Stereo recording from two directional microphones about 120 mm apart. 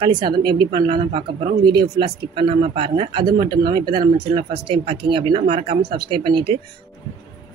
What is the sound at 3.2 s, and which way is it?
Speech, 35° right (ahead or behind).